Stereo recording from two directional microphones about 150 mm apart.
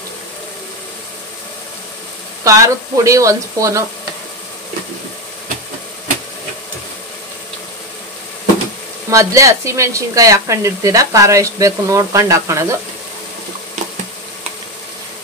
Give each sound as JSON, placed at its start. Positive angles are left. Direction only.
{"t": 2.4, "sound": "speech", "side_deg": -20}
{"t": 9.1, "sound": "speech", "side_deg": -20}